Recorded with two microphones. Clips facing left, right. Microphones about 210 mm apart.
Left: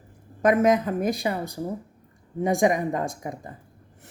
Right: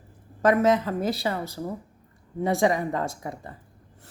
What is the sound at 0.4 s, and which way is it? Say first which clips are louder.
Speech: left 1 dB; 15° left (ahead or behind).